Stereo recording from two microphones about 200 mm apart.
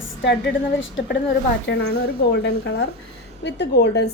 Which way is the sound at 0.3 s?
65° left (ahead or behind).